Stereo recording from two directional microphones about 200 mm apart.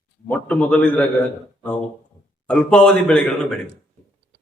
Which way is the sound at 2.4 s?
5° left (ahead or behind).